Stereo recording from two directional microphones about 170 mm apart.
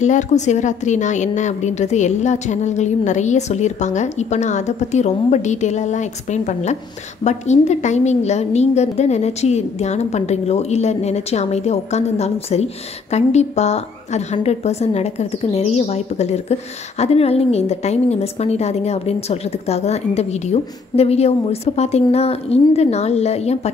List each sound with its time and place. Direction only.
0.0 s a woman's voice: 45° left (ahead or behind)